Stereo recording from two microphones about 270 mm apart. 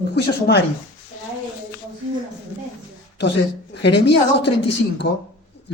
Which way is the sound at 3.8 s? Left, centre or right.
Left.